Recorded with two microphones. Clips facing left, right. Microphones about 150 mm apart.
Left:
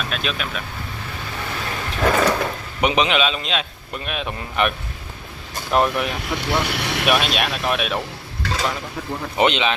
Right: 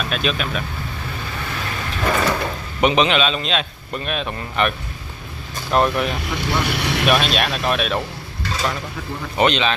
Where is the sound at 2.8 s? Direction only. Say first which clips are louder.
Right 2 dB; 5° left (ahead or behind).